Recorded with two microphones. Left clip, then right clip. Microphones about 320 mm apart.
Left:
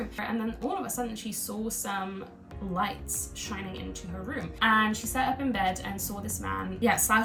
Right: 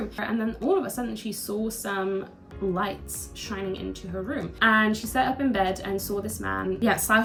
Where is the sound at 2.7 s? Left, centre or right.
Centre.